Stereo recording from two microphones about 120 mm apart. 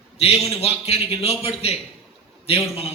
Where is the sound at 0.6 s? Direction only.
60° left (ahead or behind).